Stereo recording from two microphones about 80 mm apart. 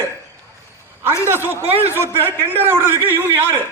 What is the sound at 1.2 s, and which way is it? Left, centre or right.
A man's voice, right.